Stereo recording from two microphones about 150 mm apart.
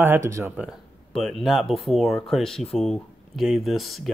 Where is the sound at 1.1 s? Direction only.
Centre (ahead or behind).